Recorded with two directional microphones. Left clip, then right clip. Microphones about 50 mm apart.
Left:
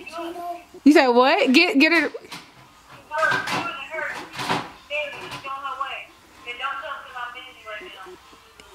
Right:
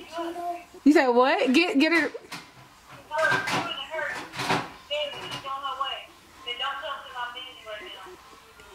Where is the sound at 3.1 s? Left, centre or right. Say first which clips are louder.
Left 2 dB; centre.